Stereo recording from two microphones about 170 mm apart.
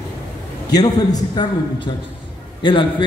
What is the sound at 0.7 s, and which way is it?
A man's voice, 25° left (ahead or behind).